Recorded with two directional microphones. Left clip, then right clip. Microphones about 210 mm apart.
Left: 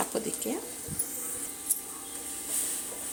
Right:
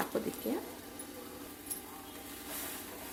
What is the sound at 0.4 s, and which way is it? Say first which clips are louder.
Speech: left 3 dB; 15° left (ahead or behind).